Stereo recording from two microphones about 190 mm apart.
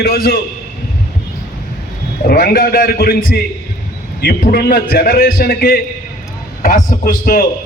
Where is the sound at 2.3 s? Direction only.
50° left (ahead or behind).